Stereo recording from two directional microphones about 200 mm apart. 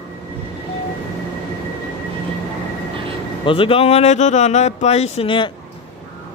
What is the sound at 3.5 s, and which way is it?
Speech, 25° left (ahead or behind).